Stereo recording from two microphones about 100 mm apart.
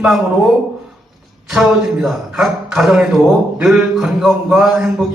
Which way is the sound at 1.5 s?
5° right (ahead or behind).